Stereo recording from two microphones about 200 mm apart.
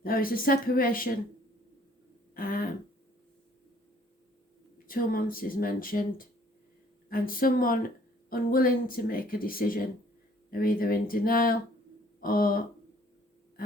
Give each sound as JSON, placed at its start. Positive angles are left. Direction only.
{"t": 0.0, "sound": "speech", "side_deg": 45}
{"t": 2.3, "sound": "throat clearing", "side_deg": 45}
{"t": 4.9, "sound": "speech", "side_deg": 45}